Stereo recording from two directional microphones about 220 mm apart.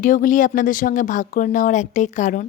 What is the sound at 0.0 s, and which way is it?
A woman's voice, 40° left (ahead or behind).